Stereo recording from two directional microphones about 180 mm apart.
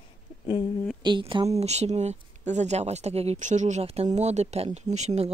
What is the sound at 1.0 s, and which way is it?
Speech, 25° right (ahead or behind).